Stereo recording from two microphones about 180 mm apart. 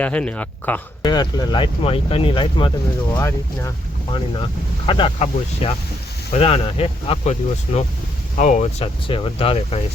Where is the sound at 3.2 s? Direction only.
15° left (ahead or behind).